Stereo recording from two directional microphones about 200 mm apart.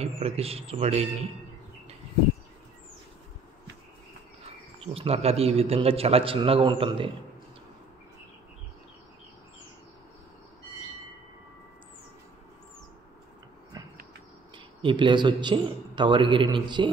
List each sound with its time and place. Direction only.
0.0 s a man's voice: 30° right (ahead or behind)
4.8 s a man's voice: 30° right (ahead or behind)
14.8 s a man's voice: 25° right (ahead or behind)